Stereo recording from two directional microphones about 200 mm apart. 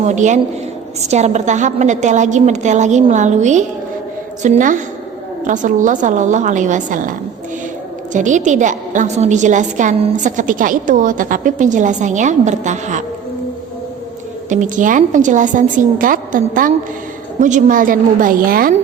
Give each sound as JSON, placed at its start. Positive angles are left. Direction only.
{"t": 1.0, "sound": "a woman's voice", "side_deg": -35}
{"t": 8.1, "sound": "a woman's voice", "side_deg": -40}
{"t": 14.5, "sound": "a woman's voice", "side_deg": -40}